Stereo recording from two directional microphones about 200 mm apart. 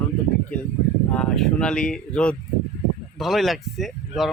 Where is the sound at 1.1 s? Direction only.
5° left (ahead or behind).